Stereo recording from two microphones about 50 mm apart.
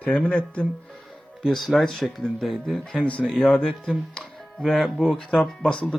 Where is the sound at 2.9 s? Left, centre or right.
Left.